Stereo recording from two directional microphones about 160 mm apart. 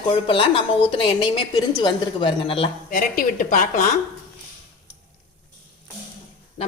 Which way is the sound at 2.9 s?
55° left (ahead or behind).